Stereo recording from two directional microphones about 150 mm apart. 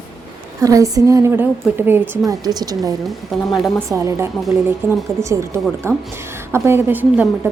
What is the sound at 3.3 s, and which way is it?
Speech, centre (ahead or behind).